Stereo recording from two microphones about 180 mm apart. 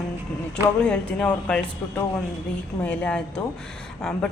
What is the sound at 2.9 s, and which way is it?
Speech, 5° left (ahead or behind).